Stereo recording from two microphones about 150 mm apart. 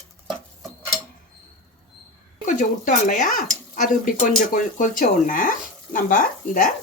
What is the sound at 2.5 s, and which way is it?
Speech, 60° left (ahead or behind).